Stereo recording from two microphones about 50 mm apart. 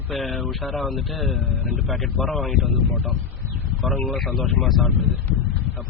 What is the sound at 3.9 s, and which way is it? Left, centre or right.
Speech, left.